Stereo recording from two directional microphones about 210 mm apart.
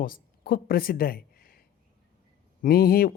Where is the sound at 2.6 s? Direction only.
45° left (ahead or behind).